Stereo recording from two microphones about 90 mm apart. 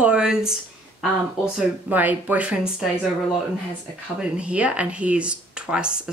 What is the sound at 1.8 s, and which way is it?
Speech, 20° right (ahead or behind).